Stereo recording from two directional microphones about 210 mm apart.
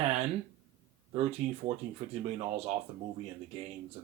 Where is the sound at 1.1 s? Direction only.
30° right (ahead or behind).